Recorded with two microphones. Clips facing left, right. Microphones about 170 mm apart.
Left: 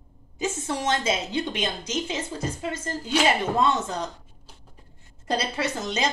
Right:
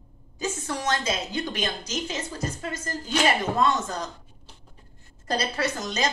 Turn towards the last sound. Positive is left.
turn(degrees=25)  # may be behind; listen again after turning